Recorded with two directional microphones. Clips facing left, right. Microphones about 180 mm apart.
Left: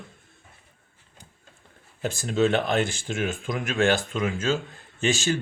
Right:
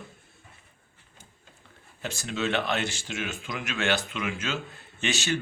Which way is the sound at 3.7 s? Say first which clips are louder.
Left 6 dB; 35° left (ahead or behind).